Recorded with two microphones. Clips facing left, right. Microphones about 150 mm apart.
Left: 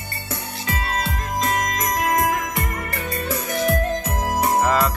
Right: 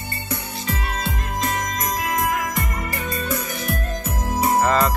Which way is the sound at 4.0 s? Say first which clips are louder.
Left 2 dB; 85° left.